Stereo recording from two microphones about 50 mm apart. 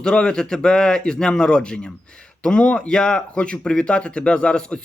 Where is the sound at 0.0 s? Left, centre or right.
Centre.